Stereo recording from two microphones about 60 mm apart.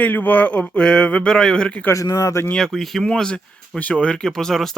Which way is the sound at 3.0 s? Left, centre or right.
Centre.